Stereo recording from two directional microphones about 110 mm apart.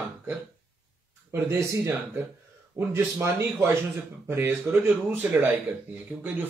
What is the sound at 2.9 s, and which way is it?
Speech, 25° right (ahead or behind).